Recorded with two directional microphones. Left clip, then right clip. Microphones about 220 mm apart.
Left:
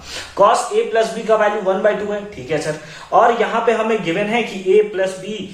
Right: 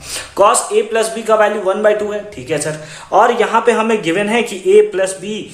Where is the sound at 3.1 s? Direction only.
50° right (ahead or behind).